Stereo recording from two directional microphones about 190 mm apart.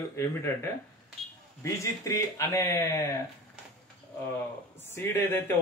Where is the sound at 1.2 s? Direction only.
Centre (ahead or behind).